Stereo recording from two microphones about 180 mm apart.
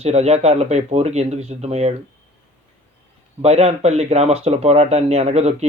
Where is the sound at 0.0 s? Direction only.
35° right (ahead or behind).